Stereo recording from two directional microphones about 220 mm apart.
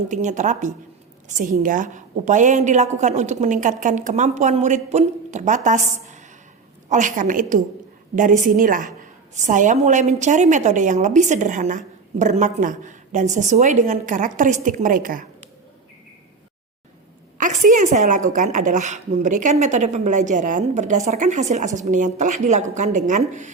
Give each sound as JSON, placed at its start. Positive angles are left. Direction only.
{"t": 0.1, "sound": "a woman's voice", "side_deg": -35}
{"t": 17.3, "sound": "a sound", "side_deg": -35}
{"t": 18.3, "sound": "a woman's voice", "side_deg": -35}